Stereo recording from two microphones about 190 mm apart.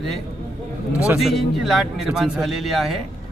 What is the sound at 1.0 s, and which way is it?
A man's voice, centre (ahead or behind).